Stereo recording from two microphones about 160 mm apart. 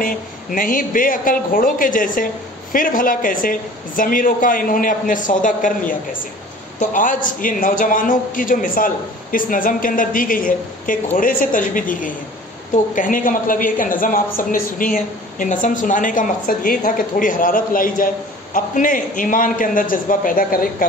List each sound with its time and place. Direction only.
0.0 s a woman's voice: 60° left (ahead or behind)